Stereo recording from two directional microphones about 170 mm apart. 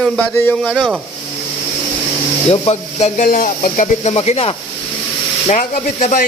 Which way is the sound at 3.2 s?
50° left (ahead or behind).